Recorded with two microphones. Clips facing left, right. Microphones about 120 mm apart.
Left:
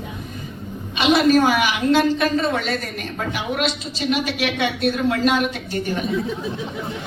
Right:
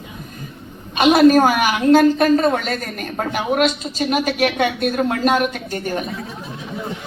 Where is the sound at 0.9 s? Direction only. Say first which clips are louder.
Right 4 dB; 45° right (ahead or behind).